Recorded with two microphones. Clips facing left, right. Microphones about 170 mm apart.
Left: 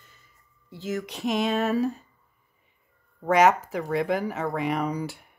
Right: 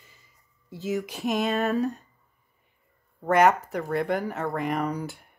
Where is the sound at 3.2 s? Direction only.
Centre (ahead or behind).